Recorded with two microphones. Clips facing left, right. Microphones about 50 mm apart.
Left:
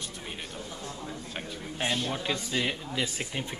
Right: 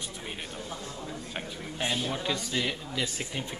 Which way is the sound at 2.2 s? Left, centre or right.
Centre.